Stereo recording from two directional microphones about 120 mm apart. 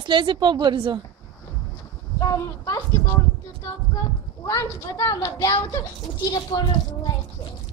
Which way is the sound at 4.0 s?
30° left (ahead or behind).